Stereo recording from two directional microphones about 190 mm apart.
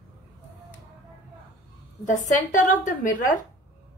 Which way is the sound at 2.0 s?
40° left (ahead or behind).